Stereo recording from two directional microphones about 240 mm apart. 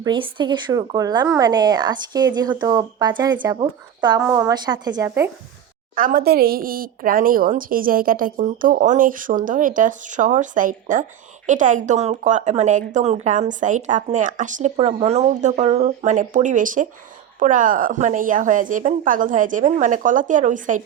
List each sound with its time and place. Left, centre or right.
0.0 s speech: centre
6.0 s speech: right